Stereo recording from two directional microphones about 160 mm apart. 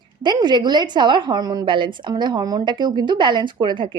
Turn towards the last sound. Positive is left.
turn(degrees=-30)  # may be behind; listen again after turning